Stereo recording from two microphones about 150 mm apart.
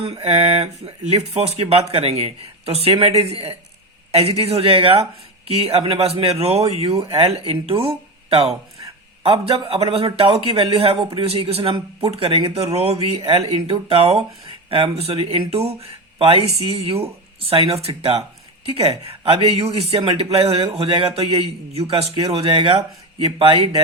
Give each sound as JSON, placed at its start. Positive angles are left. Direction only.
{"t": 0.0, "sound": "speech", "side_deg": -40}